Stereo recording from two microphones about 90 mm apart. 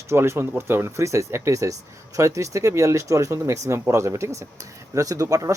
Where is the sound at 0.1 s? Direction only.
30° right (ahead or behind).